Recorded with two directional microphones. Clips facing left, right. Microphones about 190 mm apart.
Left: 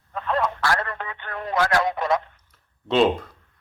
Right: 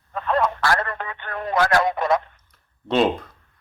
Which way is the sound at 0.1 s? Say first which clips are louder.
Right 3 dB; 50° right (ahead or behind).